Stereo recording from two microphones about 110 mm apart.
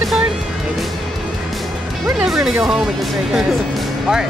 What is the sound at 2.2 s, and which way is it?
Speech, 5° right (ahead or behind).